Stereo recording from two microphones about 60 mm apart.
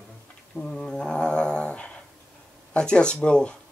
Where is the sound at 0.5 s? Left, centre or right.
Centre.